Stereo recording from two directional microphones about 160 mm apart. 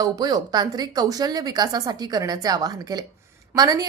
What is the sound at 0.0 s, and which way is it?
A woman's voice, 25° right (ahead or behind).